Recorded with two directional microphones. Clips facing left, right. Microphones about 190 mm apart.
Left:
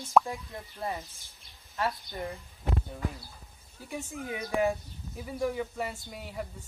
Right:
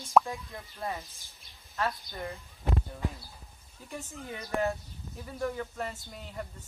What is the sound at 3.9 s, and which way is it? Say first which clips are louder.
Speech: left 4 dB; 10° left (ahead or behind).